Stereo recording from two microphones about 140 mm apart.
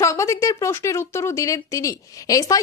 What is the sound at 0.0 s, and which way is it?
Speech, 20° left (ahead or behind).